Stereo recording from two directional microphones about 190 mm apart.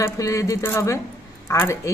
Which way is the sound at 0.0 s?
15° left (ahead or behind).